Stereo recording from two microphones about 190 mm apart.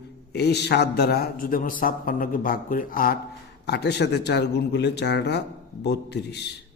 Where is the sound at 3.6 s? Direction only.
60° left (ahead or behind).